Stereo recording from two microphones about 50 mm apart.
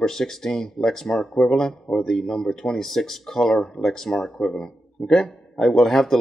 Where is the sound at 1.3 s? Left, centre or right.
Centre.